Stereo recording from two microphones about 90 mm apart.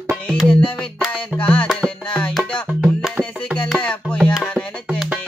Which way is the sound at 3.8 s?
10° left (ahead or behind).